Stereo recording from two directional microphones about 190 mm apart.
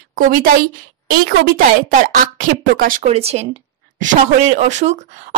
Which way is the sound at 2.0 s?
45° right (ahead or behind).